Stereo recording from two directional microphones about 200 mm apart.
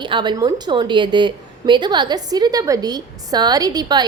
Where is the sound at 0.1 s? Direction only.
20° right (ahead or behind).